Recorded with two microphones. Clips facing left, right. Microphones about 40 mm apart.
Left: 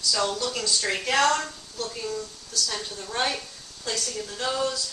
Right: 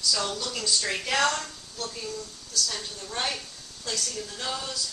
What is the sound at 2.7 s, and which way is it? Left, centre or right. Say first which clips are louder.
A woman's voice: left 3 dB; left.